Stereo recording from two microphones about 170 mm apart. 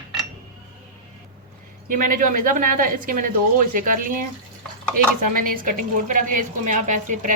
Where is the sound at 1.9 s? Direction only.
55° right (ahead or behind).